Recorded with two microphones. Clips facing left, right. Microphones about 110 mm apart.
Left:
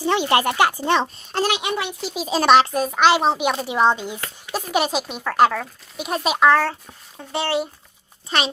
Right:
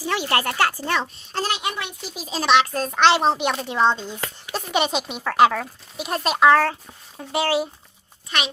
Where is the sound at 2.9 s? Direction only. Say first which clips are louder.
Even; 5° left (ahead or behind).